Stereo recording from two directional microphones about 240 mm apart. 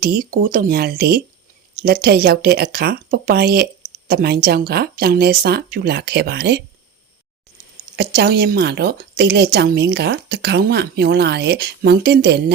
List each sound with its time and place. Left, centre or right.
0.0 s speech: right
7.9 s a woman's voice: right